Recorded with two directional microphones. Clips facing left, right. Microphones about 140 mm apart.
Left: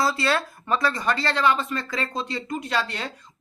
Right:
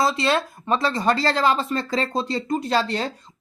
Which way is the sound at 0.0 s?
20° right (ahead or behind).